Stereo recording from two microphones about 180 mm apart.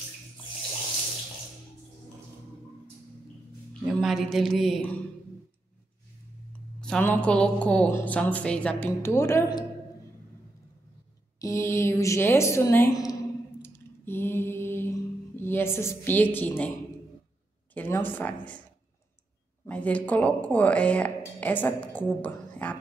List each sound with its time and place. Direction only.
3.8 s a man's voice: centre (ahead or behind)
6.8 s speech: 5° left (ahead or behind)
11.3 s speech: 15° left (ahead or behind)
13.6 s mantra: 10° left (ahead or behind)
16.3 s speech: 10° left (ahead or behind)
17.7 s speech: 10° left (ahead or behind)
19.6 s speech: 10° left (ahead or behind)